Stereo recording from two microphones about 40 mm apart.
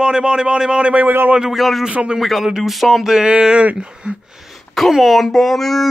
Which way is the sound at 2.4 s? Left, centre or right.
Centre.